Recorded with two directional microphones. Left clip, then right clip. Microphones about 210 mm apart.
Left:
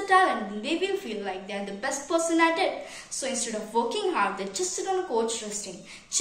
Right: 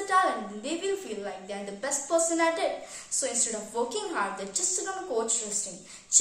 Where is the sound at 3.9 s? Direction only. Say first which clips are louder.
Left 5 dB; 25° right (ahead or behind).